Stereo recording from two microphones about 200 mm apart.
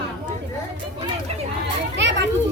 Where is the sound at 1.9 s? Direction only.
60° right (ahead or behind).